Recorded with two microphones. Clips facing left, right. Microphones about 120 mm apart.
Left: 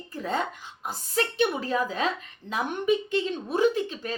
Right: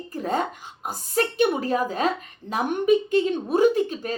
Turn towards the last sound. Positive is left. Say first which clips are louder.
# right 4 dB
turn(degrees=-45)  # may be behind; listen again after turning